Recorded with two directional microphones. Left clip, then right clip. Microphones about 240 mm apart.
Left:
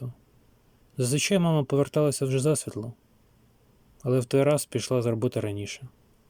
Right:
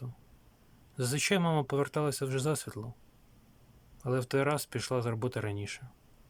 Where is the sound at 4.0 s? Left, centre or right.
Centre.